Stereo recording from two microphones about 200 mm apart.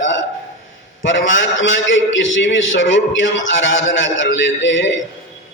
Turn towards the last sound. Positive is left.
turn(degrees=65)  # may be behind; listen again after turning